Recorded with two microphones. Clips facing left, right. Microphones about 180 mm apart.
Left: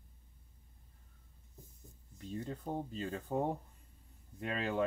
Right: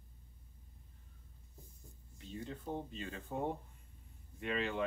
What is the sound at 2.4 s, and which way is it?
Speech, 40° left (ahead or behind).